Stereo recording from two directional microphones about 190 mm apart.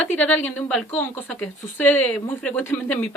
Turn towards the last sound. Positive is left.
turn(degrees=10)  # may be behind; listen again after turning